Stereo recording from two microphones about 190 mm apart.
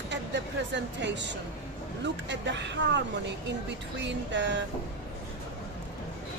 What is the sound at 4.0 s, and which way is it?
Speech, 70° right (ahead or behind).